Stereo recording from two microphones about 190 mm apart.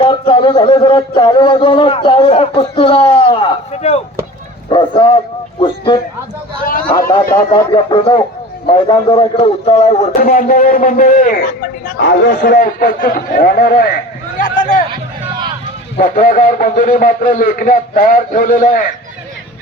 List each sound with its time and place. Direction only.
0.0 s a sound: 30° left (ahead or behind)
10.2 s a man's voice: 45° left (ahead or behind)
16.0 s a man's voice: 50° left (ahead or behind)